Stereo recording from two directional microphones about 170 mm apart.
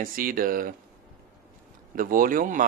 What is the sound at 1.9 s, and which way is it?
Speech, 55° right (ahead or behind).